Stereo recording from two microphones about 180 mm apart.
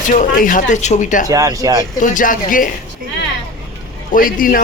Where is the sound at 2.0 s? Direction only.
45° left (ahead or behind).